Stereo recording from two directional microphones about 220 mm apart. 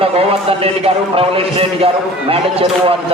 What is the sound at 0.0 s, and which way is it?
A man's voice, 25° right (ahead or behind).